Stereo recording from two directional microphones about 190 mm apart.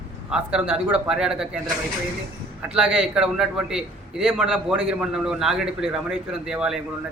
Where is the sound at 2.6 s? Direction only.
5° right (ahead or behind).